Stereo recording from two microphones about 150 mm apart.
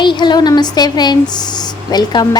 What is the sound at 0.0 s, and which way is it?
A woman's voice, 30° left (ahead or behind).